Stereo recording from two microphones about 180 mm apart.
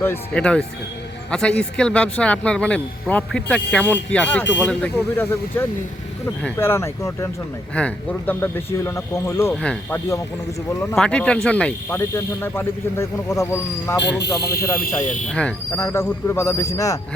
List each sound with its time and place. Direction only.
0.0 s speech: 10° left (ahead or behind)
14.2 s speech: 60° left (ahead or behind)
15.3 s speech: 5° left (ahead or behind)